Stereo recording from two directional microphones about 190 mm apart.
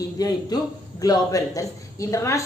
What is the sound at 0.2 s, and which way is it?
A woman's voice, 20° left (ahead or behind).